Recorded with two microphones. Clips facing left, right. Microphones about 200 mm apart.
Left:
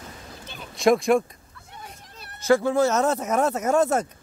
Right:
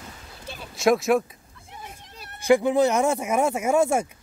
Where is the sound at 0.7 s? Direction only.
Centre (ahead or behind).